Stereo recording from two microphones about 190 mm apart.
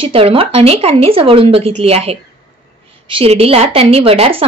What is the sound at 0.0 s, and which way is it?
A woman's voice, 30° right (ahead or behind).